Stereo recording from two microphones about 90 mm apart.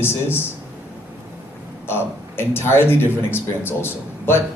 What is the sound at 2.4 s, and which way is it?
Speech, 25° left (ahead or behind).